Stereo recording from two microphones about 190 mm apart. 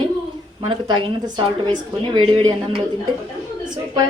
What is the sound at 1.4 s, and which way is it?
A woman's voice, 25° right (ahead or behind).